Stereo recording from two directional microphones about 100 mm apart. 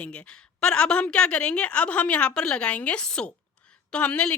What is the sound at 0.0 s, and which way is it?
A woman's voice, 10° left (ahead or behind).